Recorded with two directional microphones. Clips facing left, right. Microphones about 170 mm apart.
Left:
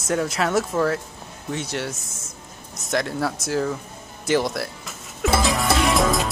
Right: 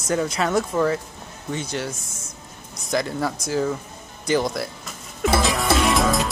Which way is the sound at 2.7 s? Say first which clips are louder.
Even; centre (ahead or behind).